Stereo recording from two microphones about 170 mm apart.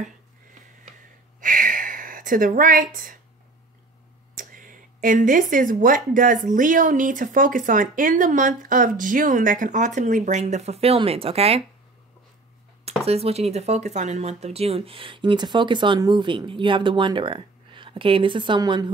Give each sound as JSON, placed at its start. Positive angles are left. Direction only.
{"t": 1.4, "sound": "a sound", "side_deg": -55}
{"t": 4.4, "sound": "speech", "side_deg": -55}
{"t": 12.8, "sound": "speech", "side_deg": -35}